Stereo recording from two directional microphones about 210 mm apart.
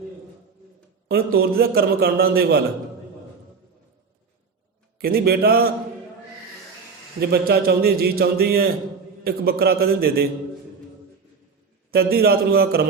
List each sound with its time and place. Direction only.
1.0 s a man's voice: 45° right (ahead or behind)
4.9 s a man's voice: 45° right (ahead or behind)
7.2 s a man's voice: 45° right (ahead or behind)
11.9 s a man's voice: 50° right (ahead or behind)